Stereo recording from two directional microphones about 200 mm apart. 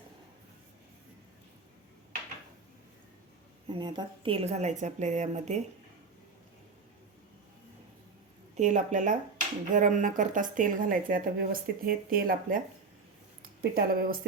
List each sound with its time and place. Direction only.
3.7 s a woman's voice: 20° right (ahead or behind)
8.5 s a woman's voice: 35° right (ahead or behind)